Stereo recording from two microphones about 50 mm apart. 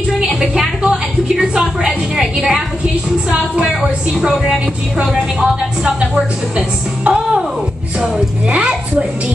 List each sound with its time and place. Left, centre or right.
0.4 s music: centre
1.4 s a sound: centre
3.3 s a woman's voice: centre
8.5 s speech: right